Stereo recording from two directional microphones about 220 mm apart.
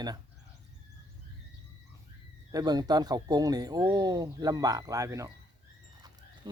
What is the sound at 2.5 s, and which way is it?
Speech, 15° right (ahead or behind).